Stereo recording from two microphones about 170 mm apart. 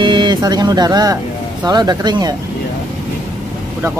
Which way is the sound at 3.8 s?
15° right (ahead or behind).